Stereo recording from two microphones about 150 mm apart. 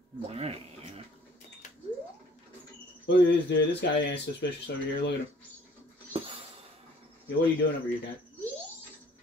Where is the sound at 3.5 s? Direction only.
90° left.